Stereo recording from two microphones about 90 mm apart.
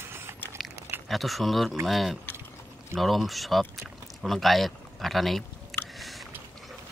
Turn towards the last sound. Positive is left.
turn(degrees=0)  # may be behind; listen again after turning